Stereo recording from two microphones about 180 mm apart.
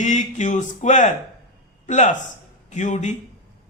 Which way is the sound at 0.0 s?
40° left (ahead or behind).